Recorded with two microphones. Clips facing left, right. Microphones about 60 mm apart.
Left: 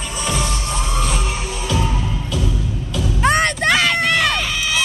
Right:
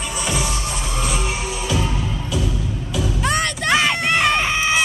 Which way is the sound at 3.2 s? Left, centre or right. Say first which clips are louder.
Left 7 dB; left.